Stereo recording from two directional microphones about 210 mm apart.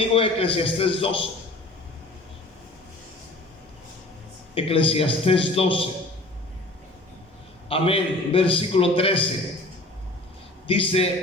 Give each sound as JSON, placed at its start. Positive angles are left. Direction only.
{"t": 0.0, "sound": "a man's voice", "side_deg": 25}
{"t": 4.5, "sound": "a man's voice", "side_deg": 25}
{"t": 7.7, "sound": "a man's voice", "side_deg": 25}
{"t": 10.7, "sound": "a man's voice", "side_deg": 25}